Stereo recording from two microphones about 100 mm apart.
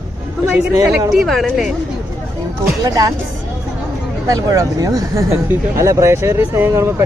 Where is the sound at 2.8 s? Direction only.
40° right (ahead or behind).